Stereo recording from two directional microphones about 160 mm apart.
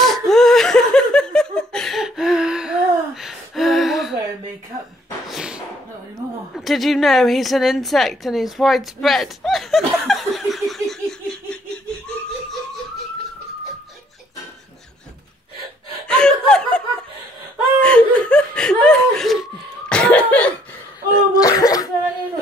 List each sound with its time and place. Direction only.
0.0 s laughter: centre (ahead or behind)
5.3 s a sound: 5° right (ahead or behind)
6.5 s a woman's voice: centre (ahead or behind)
16.1 s chuckle: 5° left (ahead or behind)
17.7 s laughter: 5° left (ahead or behind)
21.1 s throat clearing: 25° left (ahead or behind)